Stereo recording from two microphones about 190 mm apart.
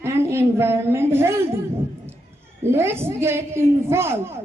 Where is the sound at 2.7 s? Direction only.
15° right (ahead or behind).